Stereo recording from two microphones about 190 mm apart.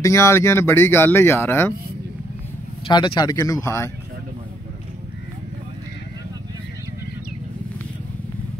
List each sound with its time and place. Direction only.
0.0 s speech: 15° left (ahead or behind)
2.9 s speech: 25° left (ahead or behind)